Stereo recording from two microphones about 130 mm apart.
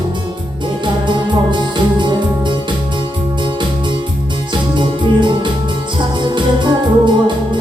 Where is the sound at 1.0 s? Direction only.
35° right (ahead or behind).